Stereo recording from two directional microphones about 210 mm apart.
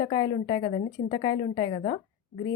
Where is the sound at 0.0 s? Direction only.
20° left (ahead or behind).